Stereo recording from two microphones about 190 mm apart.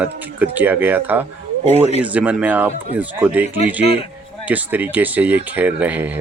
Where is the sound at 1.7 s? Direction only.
35° right (ahead or behind).